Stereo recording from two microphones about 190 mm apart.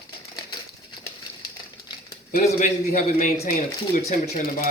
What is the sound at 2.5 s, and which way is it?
Speech, 45° left (ahead or behind).